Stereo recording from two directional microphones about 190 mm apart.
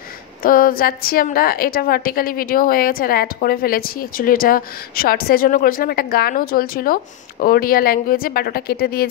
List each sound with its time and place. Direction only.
0.4 s a woman's voice: 50° left (ahead or behind)